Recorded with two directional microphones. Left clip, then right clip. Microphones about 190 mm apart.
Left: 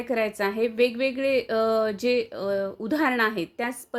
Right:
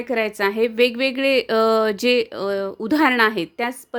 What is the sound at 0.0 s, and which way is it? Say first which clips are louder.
A woman's voice: right 4 dB; 25° right (ahead or behind).